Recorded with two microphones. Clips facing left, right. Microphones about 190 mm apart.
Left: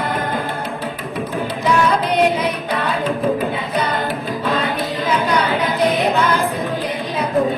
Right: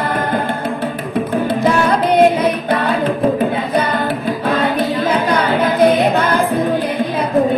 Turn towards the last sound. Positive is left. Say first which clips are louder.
# right 3 dB
turn(degrees=-50)  # may be behind; listen again after turning